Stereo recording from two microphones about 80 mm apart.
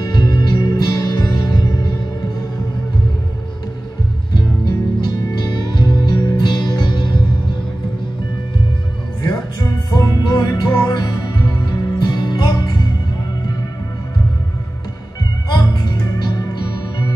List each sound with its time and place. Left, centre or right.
0.1 s music: left
4.3 s music: left
9.3 s music: left
16.2 s music: left